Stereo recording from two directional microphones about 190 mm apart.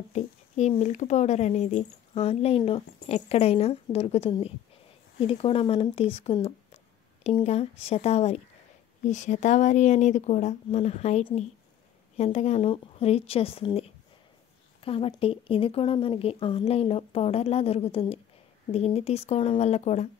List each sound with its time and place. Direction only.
0.1 s speech: 35° left (ahead or behind)